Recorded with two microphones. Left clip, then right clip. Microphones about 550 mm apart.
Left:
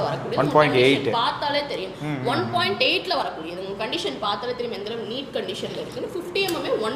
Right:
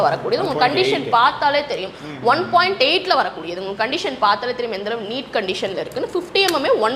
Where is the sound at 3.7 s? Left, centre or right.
Right.